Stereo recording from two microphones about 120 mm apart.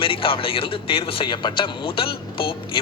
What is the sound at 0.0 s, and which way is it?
A man's voice, 50° left (ahead or behind).